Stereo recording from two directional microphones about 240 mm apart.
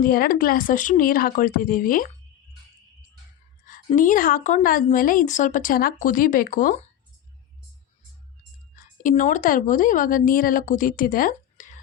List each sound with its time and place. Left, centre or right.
0.0 s a woman's voice: left
3.7 s a woman's voice: left
8.7 s speech: left